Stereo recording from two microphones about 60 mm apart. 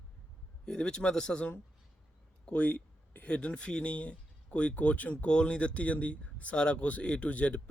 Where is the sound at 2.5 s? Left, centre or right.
Left.